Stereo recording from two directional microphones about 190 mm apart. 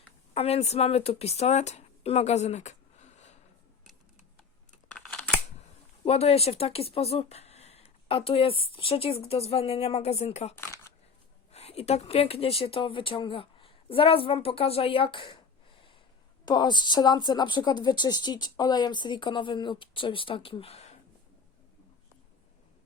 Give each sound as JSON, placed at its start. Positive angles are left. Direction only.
{"t": 0.3, "sound": "speech", "side_deg": 30}
{"t": 4.9, "sound": "scissors", "side_deg": 5}
{"t": 6.1, "sound": "speech", "side_deg": 35}
{"t": 10.6, "sound": "a sound", "side_deg": 15}
{"t": 11.5, "sound": "speech", "side_deg": 35}
{"t": 16.5, "sound": "speech", "side_deg": 25}